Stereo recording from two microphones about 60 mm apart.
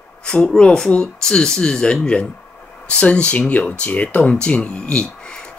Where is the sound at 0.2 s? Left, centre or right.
Centre.